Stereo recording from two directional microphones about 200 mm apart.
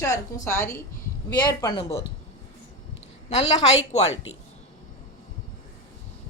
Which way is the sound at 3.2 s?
35° left (ahead or behind).